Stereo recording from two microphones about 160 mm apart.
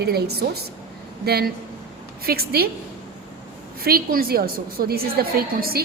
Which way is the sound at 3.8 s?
70° right (ahead or behind).